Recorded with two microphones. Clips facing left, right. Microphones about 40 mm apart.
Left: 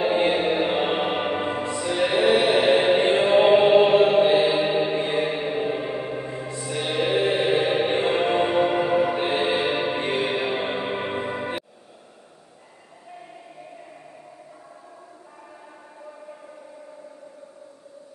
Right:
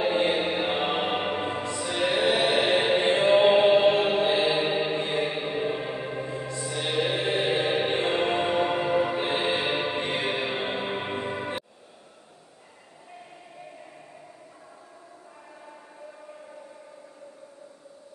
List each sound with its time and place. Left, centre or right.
0.0 s music: centre
1.9 s music: centre
3.8 s chant: centre
4.4 s choir: centre
4.9 s music: centre
6.5 s music: left
6.8 s music: centre